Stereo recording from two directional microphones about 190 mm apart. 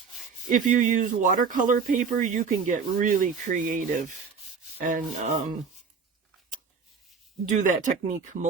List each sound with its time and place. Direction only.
0.5 s speech: 40° right (ahead or behind)
4.9 s speech: 40° right (ahead or behind)
7.5 s speech: 40° right (ahead or behind)